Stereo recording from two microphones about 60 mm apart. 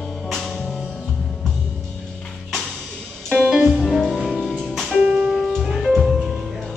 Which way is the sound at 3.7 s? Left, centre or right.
Centre.